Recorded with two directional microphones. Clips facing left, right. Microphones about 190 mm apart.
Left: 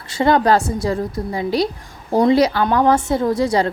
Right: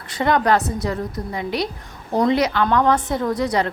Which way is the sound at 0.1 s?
30° left (ahead or behind).